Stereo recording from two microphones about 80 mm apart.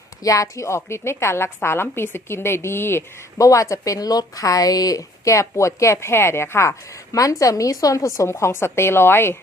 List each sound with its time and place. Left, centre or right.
0.2 s a woman's voice: left
3.3 s speech: left